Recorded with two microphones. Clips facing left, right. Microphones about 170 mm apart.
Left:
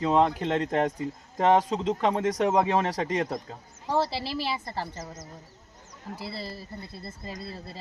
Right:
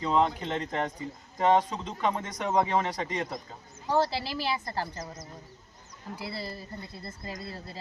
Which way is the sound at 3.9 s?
Centre (ahead or behind).